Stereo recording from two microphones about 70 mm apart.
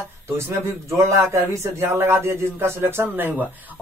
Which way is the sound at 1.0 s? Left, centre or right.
Right.